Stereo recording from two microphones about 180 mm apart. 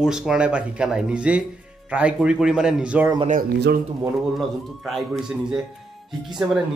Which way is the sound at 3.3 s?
50° right (ahead or behind).